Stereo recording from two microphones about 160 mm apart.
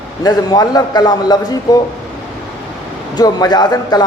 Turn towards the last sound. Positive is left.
turn(degrees=25)  # may be behind; listen again after turning